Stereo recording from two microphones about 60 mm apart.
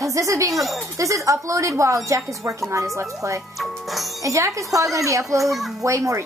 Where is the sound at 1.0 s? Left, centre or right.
Right.